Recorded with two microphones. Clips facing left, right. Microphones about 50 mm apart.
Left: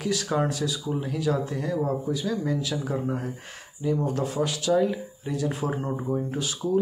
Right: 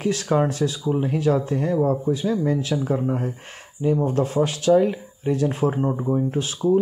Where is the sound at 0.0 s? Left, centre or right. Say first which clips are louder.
Right 5 dB; right.